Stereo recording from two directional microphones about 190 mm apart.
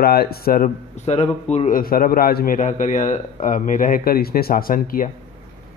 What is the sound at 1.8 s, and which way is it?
A man's voice, 50° left (ahead or behind).